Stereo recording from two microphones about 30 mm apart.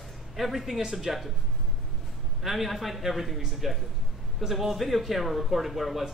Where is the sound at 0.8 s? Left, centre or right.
Right.